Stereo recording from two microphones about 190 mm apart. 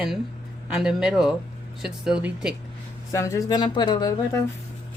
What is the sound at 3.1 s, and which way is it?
Speech, 15° left (ahead or behind).